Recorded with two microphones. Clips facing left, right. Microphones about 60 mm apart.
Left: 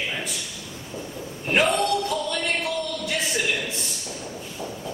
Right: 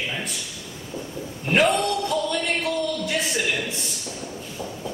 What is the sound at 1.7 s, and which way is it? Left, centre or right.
Speech, centre.